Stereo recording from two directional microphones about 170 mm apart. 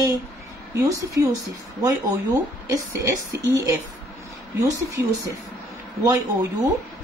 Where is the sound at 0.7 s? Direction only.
20° right (ahead or behind).